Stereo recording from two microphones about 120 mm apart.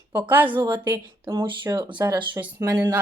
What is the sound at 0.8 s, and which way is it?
Speech, 40° right (ahead or behind).